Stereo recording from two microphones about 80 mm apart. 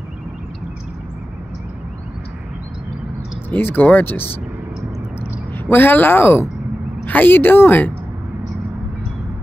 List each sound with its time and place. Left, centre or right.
3.4 s speech: left
5.7 s speech: left